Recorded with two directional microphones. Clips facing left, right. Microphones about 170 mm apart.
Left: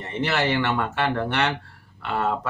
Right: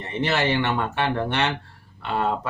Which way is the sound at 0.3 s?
20° right (ahead or behind).